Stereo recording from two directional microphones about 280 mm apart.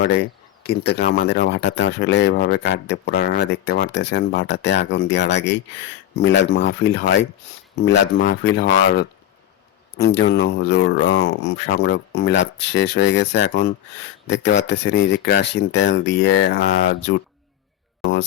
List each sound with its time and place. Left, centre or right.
0.7 s speech: left